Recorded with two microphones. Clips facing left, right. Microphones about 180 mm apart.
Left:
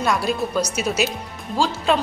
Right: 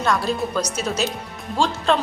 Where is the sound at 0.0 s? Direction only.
10° left (ahead or behind).